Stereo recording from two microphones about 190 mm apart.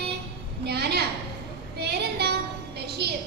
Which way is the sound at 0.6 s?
60° right (ahead or behind).